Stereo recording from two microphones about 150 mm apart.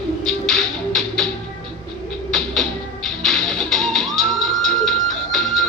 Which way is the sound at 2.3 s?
Centre (ahead or behind).